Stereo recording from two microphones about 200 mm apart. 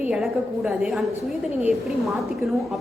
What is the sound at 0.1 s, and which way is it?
A woman's voice, 5° right (ahead or behind).